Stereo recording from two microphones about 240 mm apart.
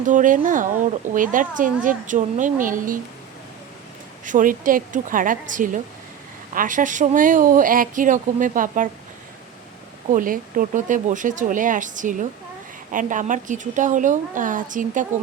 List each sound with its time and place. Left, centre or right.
0.0 s speech: right
4.3 s speech: right
10.1 s speech: right